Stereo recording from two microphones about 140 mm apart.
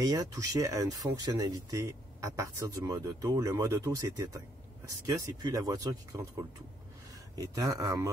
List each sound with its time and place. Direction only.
0.0 s speech: 25° right (ahead or behind)
7.3 s speech: 25° right (ahead or behind)